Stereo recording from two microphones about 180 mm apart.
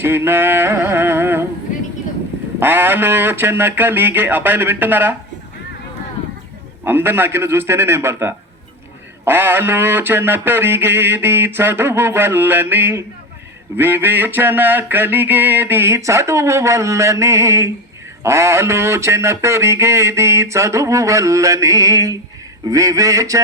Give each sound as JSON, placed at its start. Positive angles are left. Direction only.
{"t": 0.0, "sound": "a sound", "side_deg": -10}
{"t": 2.6, "sound": "speech", "side_deg": -10}
{"t": 6.8, "sound": "a man's voice", "side_deg": -10}